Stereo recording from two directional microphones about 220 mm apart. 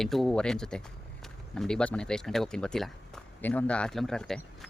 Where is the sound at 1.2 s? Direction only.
Centre (ahead or behind).